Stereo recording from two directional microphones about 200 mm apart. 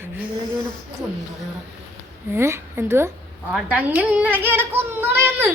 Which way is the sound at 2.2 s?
10° right (ahead or behind).